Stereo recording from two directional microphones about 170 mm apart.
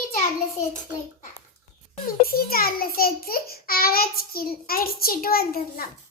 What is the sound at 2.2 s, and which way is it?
A child's voice, 60° left (ahead or behind).